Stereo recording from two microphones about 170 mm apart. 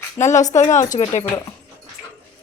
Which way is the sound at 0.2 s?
45° left (ahead or behind).